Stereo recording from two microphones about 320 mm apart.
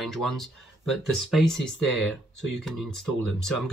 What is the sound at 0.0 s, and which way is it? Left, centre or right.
Speech, centre.